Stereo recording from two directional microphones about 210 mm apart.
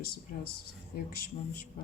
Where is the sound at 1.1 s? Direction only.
45° left (ahead or behind).